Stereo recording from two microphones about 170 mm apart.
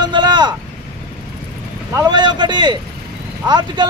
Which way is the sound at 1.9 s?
25° right (ahead or behind).